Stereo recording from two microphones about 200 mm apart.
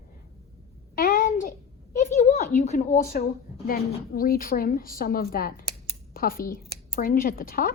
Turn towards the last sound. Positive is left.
turn(degrees=45)  # may be behind; listen again after turning